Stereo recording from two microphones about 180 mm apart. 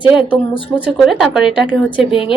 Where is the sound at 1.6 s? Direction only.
30° left (ahead or behind).